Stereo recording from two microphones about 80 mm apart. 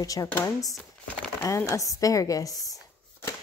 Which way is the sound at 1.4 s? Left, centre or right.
Left.